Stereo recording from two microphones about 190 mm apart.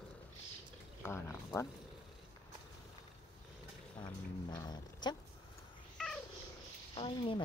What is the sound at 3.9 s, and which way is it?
Speech, 20° left (ahead or behind).